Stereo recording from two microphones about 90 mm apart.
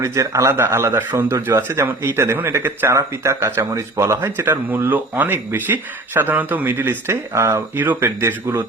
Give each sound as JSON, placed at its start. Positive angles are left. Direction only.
{"t": 0.0, "sound": "speech", "side_deg": -35}